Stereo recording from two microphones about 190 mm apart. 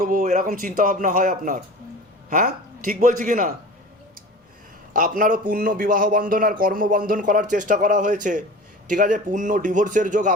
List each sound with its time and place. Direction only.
0.0 s a man's voice: 45° right (ahead or behind)
4.9 s a man's voice: 45° right (ahead or behind)